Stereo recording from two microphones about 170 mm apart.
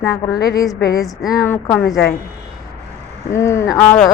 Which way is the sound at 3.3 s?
15° left (ahead or behind).